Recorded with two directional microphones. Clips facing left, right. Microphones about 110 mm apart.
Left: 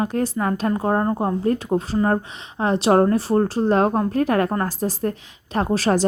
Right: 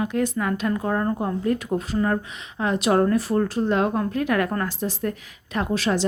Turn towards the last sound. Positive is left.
turn(degrees=40)  # may be behind; listen again after turning